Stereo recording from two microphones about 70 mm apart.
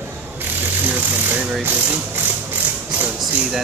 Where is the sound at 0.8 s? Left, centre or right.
Right.